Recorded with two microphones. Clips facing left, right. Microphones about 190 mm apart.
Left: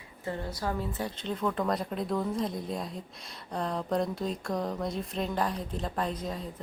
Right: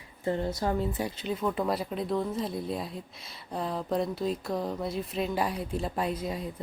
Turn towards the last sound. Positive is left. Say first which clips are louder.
# right 2 dB
turn(degrees=-10)  # may be behind; listen again after turning